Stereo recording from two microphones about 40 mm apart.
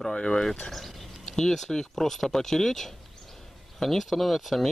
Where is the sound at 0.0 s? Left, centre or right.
Centre.